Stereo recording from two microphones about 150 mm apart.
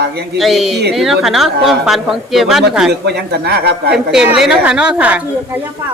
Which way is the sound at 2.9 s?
90° right.